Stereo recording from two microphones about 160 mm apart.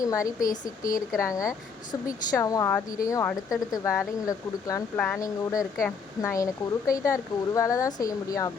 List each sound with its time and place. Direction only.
0.0 s speech: 20° left (ahead or behind)
0.3 s speech: 55° left (ahead or behind)
1.2 s speech: 20° left (ahead or behind)
4.9 s speech: 5° left (ahead or behind)
5.2 s speech: 20° left (ahead or behind)